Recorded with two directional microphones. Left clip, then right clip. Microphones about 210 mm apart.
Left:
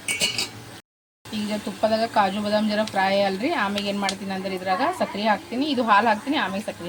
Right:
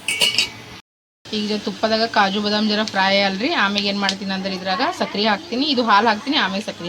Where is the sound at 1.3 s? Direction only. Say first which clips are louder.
Right 6 dB; 5° right (ahead or behind).